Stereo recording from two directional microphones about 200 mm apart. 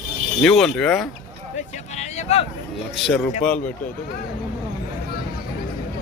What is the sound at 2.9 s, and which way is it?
Speech, centre (ahead or behind).